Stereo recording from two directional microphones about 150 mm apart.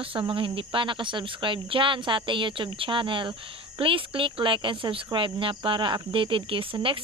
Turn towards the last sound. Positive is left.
turn(degrees=-35)  # may be behind; listen again after turning